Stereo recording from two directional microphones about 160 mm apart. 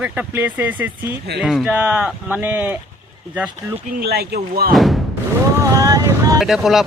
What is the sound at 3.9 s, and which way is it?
Speech, 75° right (ahead or behind).